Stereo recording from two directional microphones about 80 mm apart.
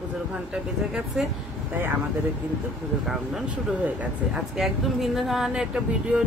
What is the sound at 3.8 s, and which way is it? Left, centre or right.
Speech, centre.